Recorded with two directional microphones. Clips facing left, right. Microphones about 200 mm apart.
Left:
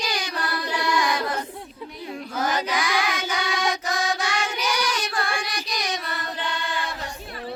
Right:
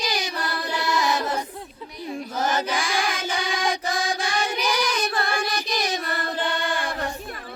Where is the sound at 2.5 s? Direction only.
50° right (ahead or behind).